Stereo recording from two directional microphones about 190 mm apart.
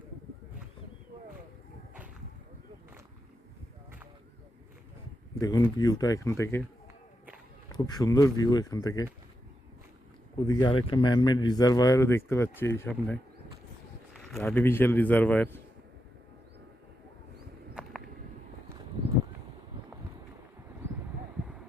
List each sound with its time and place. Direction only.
5.3 s speech: 20° left (ahead or behind)
7.7 s speech: 20° left (ahead or behind)
10.4 s speech: 20° left (ahead or behind)